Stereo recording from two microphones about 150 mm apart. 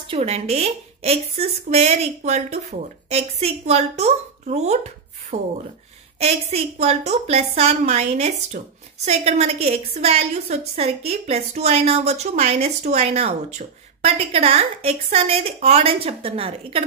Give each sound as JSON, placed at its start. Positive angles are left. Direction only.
{"t": 0.1, "sound": "a woman's voice", "side_deg": -45}